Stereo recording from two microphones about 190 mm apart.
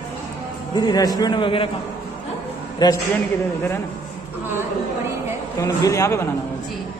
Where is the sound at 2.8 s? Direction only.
20° left (ahead or behind).